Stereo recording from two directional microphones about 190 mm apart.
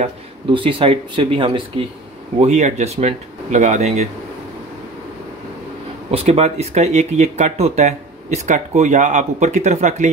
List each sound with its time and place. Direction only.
0.0 s speech: 25° right (ahead or behind)
6.1 s speech: 35° right (ahead or behind)